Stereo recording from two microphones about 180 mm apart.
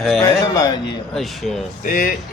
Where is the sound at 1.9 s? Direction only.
50° left (ahead or behind).